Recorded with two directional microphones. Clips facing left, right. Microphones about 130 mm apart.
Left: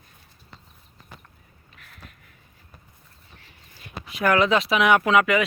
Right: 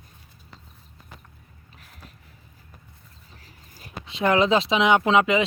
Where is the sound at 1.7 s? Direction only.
35° right (ahead or behind).